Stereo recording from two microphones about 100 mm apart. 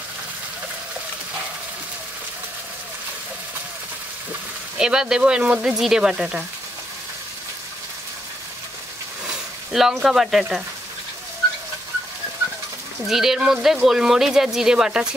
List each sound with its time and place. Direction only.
4.7 s speech: 5° right (ahead or behind)
9.7 s speech: 5° right (ahead or behind)
13.0 s speech: 5° right (ahead or behind)